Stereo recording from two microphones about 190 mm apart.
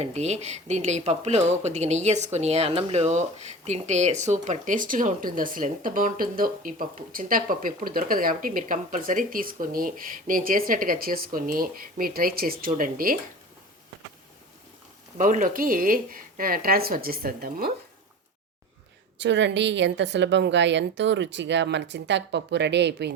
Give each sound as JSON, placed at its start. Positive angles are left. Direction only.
{"t": 0.0, "sound": "speech", "side_deg": -35}
{"t": 15.2, "sound": "speech", "side_deg": -45}
{"t": 19.2, "sound": "a woman's voice", "side_deg": -70}